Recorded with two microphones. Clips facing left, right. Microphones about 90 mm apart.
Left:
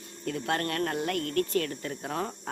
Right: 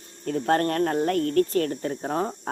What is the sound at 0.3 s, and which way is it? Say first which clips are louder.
Speech: right 7 dB; 40° right (ahead or behind).